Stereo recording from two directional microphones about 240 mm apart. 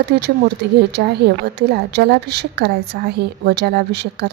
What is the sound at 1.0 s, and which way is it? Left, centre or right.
A woman's voice, right.